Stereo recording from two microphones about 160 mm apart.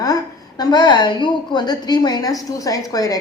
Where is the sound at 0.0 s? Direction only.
25° left (ahead or behind).